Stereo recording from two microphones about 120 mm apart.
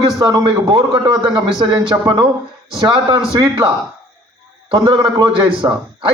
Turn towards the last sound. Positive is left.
turn(degrees=-35)  # may be behind; listen again after turning